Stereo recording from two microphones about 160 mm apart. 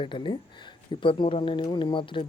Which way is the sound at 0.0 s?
30° left (ahead or behind).